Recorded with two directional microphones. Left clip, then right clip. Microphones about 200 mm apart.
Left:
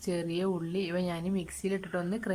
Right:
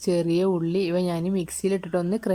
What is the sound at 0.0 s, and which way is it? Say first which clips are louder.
A woman's voice: right 10 dB; 20° right (ahead or behind).